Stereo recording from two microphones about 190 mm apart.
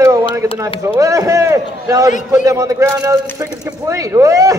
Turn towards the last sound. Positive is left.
turn(degrees=-15)  # may be behind; listen again after turning